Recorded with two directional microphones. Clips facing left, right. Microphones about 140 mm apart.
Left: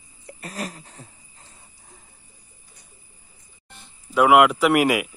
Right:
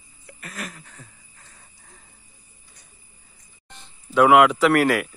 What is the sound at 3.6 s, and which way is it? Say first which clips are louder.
Speech: right 2 dB; 10° left (ahead or behind).